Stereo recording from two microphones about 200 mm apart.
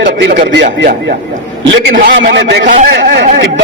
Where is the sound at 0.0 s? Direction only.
60° right (ahead or behind).